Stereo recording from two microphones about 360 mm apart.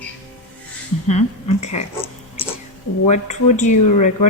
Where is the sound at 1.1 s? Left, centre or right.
Centre.